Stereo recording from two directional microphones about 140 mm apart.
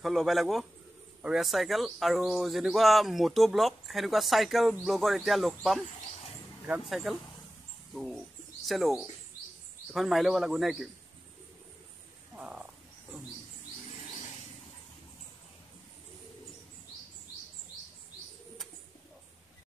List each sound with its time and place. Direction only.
0.0 s speech: centre (ahead or behind)
5.9 s a sound: 55° left (ahead or behind)
6.9 s speech: centre (ahead or behind)
12.4 s frog: 10° right (ahead or behind)